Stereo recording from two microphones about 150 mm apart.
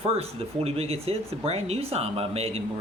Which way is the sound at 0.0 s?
40° right (ahead or behind).